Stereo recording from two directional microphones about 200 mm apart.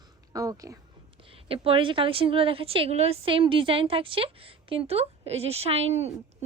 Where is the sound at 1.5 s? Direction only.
25° right (ahead or behind).